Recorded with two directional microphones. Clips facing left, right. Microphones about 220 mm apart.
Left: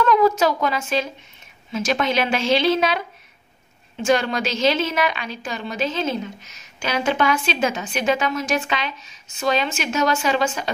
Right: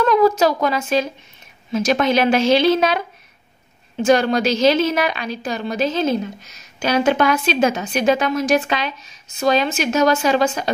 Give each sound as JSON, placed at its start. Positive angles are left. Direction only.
{"t": 0.0, "sound": "a woman's voice", "side_deg": -35}
{"t": 4.0, "sound": "a woman's voice", "side_deg": -40}